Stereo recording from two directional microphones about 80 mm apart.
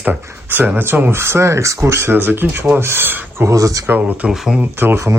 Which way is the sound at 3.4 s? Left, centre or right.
Right.